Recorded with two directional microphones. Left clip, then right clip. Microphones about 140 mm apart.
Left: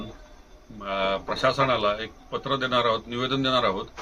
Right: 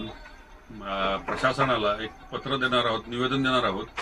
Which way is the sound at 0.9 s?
15° left (ahead or behind).